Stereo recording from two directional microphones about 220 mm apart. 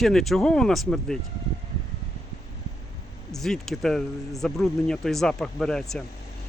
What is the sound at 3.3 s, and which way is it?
Speech, centre (ahead or behind).